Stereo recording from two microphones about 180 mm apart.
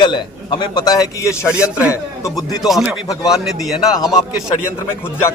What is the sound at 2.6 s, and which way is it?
Speech, centre (ahead or behind).